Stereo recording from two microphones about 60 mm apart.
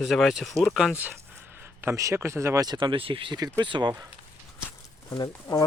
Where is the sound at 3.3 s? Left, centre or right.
Right.